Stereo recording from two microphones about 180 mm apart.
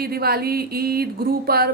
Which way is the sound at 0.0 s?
60° right (ahead or behind).